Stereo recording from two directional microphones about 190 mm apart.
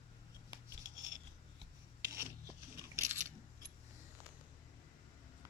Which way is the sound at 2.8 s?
15° right (ahead or behind).